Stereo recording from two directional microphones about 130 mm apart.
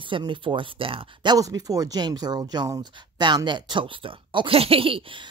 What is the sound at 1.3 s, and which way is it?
Speech, 30° right (ahead or behind).